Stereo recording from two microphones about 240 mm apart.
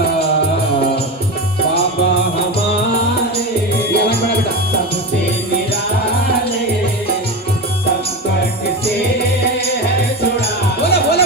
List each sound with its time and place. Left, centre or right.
3.9 s music: left
10.8 s music: left